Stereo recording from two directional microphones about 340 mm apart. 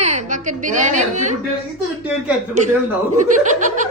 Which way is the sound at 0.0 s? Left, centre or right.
Centre.